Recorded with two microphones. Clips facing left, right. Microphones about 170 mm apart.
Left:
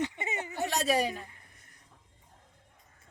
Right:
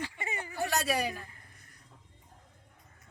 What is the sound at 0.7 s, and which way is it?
Speech, centre (ahead or behind).